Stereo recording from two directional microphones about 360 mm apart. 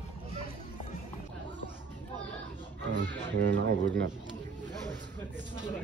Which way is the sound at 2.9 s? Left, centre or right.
Right.